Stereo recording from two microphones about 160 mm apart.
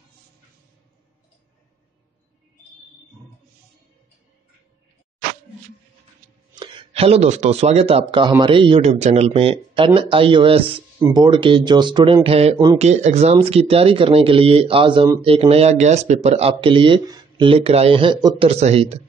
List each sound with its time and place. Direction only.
6.5 s speech: 30° right (ahead or behind)